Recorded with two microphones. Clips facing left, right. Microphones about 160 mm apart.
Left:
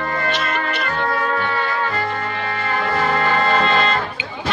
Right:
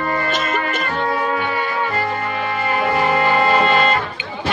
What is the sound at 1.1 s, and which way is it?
Music, 10° right (ahead or behind).